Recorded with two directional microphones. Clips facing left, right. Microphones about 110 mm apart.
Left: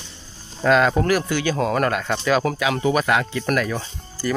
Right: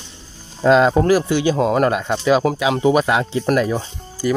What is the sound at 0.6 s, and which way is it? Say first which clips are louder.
Speech: right 4 dB; 25° right (ahead or behind).